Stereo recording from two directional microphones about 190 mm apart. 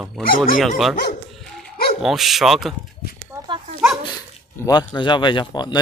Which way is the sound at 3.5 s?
25° right (ahead or behind).